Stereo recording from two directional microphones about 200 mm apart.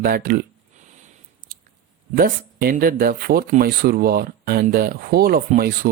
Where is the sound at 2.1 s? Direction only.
45° right (ahead or behind).